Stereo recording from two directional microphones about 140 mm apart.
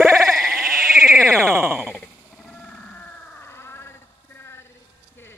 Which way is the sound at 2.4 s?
5° left (ahead or behind).